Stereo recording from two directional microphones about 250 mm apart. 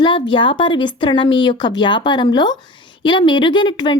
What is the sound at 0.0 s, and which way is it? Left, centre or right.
A woman's voice, centre.